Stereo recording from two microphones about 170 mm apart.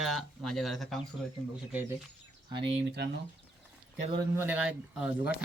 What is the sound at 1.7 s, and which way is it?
Speech, 10° right (ahead or behind).